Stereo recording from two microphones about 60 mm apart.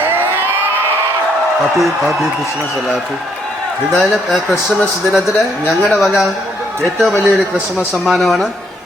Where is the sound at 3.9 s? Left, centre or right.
Centre.